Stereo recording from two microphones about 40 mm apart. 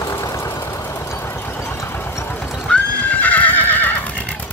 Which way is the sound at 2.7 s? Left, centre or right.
Left.